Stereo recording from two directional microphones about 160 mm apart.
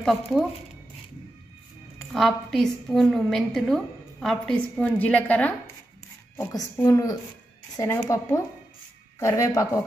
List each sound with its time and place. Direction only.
0.0 s a woman's voice: centre (ahead or behind)
2.1 s a woman's voice: centre (ahead or behind)
6.3 s a woman's voice: 20° left (ahead or behind)
9.2 s a woman's voice: 20° left (ahead or behind)